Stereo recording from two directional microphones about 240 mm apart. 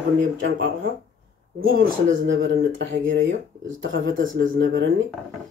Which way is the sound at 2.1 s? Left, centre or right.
Right.